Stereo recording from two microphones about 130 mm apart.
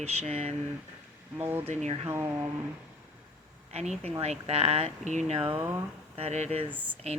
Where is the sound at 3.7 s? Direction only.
55° right (ahead or behind).